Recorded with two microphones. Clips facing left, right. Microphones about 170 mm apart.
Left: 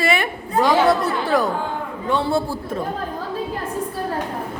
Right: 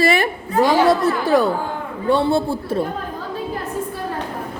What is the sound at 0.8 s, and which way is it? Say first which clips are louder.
Speech: right 2 dB; 25° right (ahead or behind).